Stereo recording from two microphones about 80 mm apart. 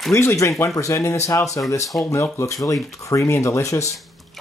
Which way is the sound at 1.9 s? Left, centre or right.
Left.